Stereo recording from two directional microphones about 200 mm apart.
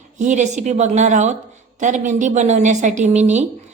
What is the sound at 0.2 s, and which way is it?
A woman's voice, 35° right (ahead or behind).